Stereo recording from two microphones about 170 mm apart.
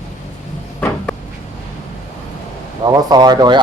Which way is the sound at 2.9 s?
25° right (ahead or behind).